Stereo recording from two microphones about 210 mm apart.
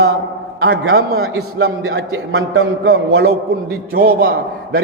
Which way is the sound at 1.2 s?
90° right.